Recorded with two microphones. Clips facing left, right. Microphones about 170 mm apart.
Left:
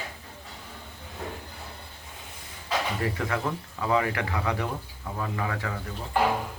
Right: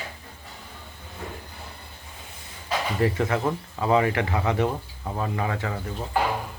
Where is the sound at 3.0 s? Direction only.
30° right (ahead or behind).